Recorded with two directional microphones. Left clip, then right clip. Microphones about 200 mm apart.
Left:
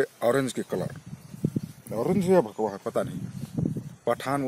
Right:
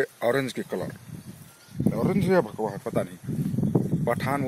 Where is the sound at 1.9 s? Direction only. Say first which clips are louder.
Left 1 dB; 20° left (ahead or behind).